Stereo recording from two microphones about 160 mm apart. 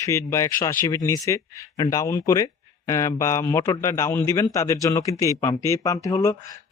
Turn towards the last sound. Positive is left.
turn(degrees=20)  # may be behind; listen again after turning